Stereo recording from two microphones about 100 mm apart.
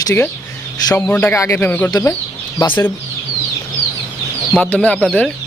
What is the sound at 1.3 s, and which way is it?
Speech, 30° left (ahead or behind).